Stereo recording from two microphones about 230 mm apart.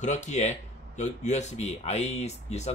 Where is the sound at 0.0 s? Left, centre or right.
Left.